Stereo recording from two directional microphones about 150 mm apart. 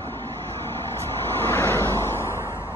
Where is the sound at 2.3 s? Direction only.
20° right (ahead or behind).